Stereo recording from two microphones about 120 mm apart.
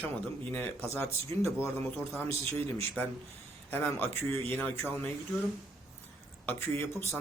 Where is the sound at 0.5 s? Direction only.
15° left (ahead or behind).